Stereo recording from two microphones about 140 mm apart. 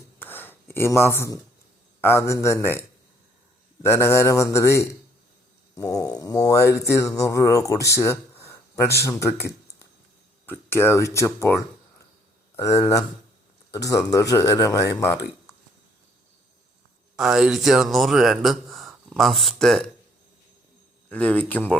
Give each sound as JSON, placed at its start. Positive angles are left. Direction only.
{"t": 0.2, "sound": "a sound", "side_deg": 15}
{"t": 2.0, "sound": "speech", "side_deg": 20}
{"t": 3.8, "sound": "speech", "side_deg": 20}
{"t": 17.2, "sound": "speech", "side_deg": -5}
{"t": 21.1, "sound": "speech", "side_deg": 10}